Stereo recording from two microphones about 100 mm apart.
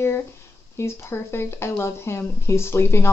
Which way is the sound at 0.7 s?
25° left (ahead or behind).